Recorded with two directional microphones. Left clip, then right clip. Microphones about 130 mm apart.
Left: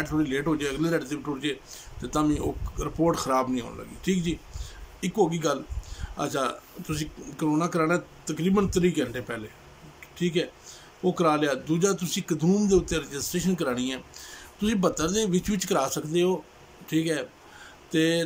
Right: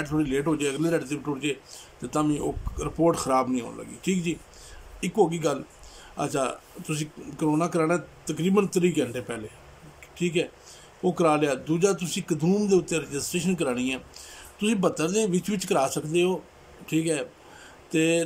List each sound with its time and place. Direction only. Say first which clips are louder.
0.0 s speech: right 1 dB; 15° right (ahead or behind)